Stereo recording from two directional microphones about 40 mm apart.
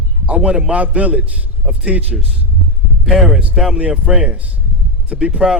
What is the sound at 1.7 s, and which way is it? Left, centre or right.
Speech, right.